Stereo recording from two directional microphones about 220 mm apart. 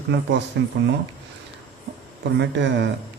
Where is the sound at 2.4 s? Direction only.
55° right (ahead or behind).